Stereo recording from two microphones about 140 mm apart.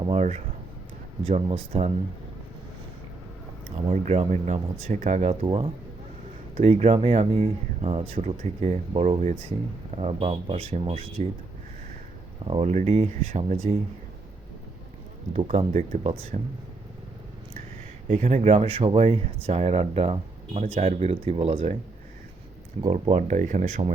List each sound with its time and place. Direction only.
0.0 s speech: 50° right (ahead or behind)
4.3 s speech: 55° right (ahead or behind)
5.5 s speech: 40° right (ahead or behind)
12.5 s speech: 50° right (ahead or behind)
15.3 s speech: 55° right (ahead or behind)
18.1 s speech: 50° right (ahead or behind)
22.9 s speech: 50° right (ahead or behind)